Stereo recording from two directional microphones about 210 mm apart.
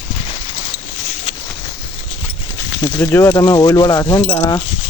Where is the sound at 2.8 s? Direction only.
10° left (ahead or behind).